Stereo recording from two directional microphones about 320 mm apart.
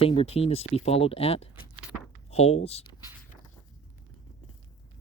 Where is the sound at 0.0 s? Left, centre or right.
Centre.